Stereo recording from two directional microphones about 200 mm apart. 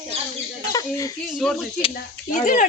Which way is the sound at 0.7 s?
15° left (ahead or behind).